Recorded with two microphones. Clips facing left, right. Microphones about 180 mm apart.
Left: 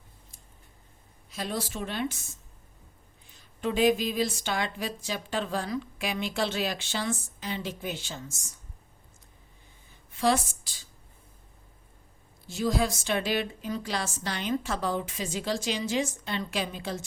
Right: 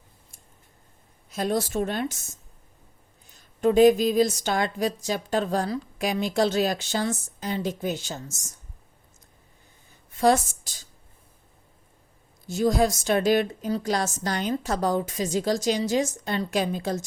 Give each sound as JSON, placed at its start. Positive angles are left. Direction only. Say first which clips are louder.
{"t": 1.3, "sound": "a woman's voice", "louder": "right 8 dB", "side_deg": -45}
{"t": 10.2, "sound": "a woman's voice", "louder": "right 5 dB", "side_deg": -45}
{"t": 12.5, "sound": "a woman's voice", "louder": "right 6 dB", "side_deg": -45}